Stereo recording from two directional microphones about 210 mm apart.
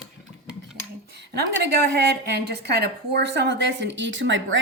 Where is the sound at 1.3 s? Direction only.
50° right (ahead or behind).